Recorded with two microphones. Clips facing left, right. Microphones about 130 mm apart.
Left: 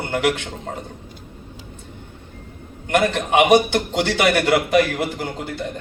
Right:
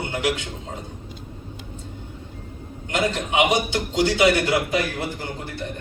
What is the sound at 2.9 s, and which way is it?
A man's voice, 65° left (ahead or behind).